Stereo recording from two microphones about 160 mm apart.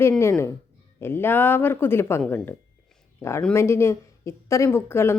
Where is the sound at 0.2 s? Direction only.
15° left (ahead or behind).